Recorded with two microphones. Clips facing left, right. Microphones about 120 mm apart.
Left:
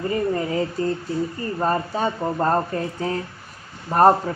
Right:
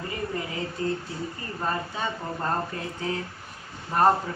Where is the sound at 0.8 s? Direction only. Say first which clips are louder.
Left 3 dB; 40° left (ahead or behind).